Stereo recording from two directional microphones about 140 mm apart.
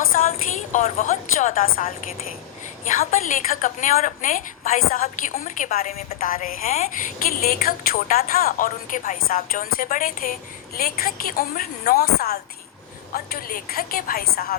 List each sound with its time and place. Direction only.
0.1 s a sound: 80° left
0.8 s a woman's voice: 60° left (ahead or behind); by 1.9 s 90° left
2.9 s a woman's voice: 70° left (ahead or behind); by 5.1 s 90° left
5.3 s a woman's voice: 70° left (ahead or behind); by 6.1 s 55° left (ahead or behind)
6.1 s a woman's voice: 90° left